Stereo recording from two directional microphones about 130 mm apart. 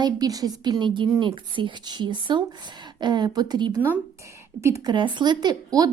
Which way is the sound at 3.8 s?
15° right (ahead or behind).